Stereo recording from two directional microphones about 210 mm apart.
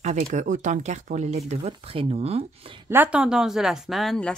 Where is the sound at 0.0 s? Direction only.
35° right (ahead or behind).